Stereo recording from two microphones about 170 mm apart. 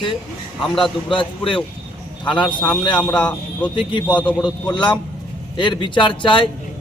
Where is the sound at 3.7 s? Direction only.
30° left (ahead or behind).